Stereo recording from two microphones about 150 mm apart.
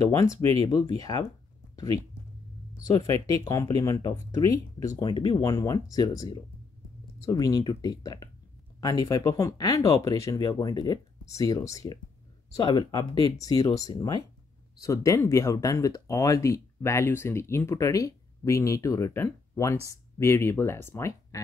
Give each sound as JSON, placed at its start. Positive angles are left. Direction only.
{"t": 0.1, "sound": "speech", "side_deg": 20}
{"t": 3.3, "sound": "speech", "side_deg": 20}